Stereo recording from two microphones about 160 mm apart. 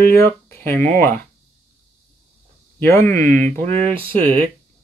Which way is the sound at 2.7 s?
15° left (ahead or behind).